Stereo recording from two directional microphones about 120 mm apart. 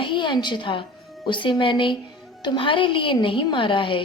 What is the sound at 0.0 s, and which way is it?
A woman's voice, 40° left (ahead or behind).